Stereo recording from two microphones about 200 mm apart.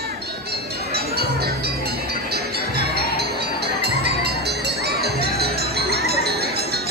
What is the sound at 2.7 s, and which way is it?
Music, 55° right (ahead or behind).